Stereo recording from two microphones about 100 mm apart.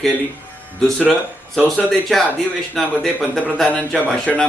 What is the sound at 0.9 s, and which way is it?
A man's voice, 5° left (ahead or behind).